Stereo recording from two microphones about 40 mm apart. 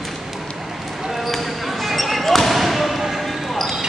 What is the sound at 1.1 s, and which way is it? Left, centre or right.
Basketball bounce, centre.